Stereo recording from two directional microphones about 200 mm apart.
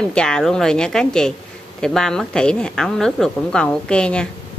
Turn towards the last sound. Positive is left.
turn(degrees=5)  # may be behind; listen again after turning